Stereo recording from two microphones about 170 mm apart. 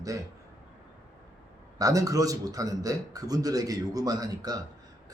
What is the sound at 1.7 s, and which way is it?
A man's voice, 20° right (ahead or behind).